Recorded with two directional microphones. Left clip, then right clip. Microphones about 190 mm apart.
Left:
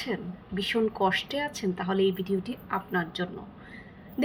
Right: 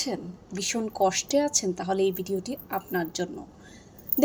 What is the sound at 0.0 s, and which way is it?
A woman's voice, 40° right (ahead or behind).